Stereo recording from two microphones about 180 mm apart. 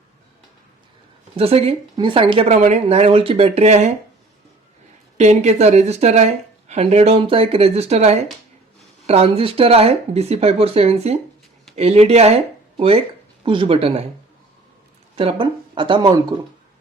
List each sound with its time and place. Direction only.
1.4 s speech: 35° right (ahead or behind)
5.1 s speech: 40° right (ahead or behind)
13.4 s speech: 30° right (ahead or behind)
15.1 s speech: 30° right (ahead or behind)